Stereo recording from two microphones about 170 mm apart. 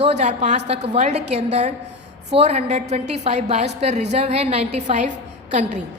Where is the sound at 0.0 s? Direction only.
40° right (ahead or behind).